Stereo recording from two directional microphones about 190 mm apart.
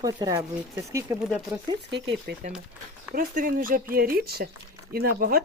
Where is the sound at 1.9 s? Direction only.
65° right (ahead or behind).